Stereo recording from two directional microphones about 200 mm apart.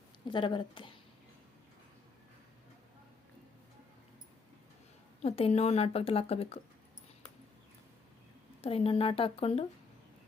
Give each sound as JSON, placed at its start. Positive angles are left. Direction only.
{"t": 0.3, "sound": "a woman's voice", "side_deg": 25}
{"t": 5.2, "sound": "a woman's voice", "side_deg": 30}
{"t": 8.6, "sound": "a woman's voice", "side_deg": 30}